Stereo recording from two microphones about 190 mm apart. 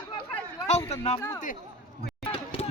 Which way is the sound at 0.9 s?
35° left (ahead or behind).